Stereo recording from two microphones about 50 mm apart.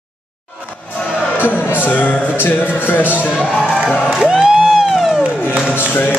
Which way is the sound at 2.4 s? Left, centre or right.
Left.